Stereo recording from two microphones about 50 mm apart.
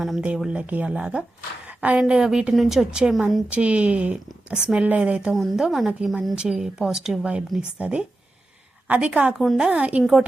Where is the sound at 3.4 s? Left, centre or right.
Right.